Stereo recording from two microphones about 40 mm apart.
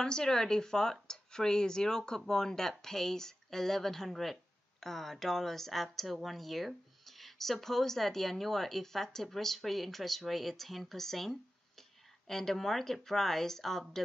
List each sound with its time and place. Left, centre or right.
0.0 s speech: centre